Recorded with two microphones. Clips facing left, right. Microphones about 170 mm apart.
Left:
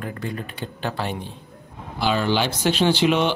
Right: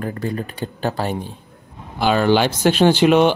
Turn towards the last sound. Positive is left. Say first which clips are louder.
# right 6 dB
turn(degrees=-50)  # may be behind; listen again after turning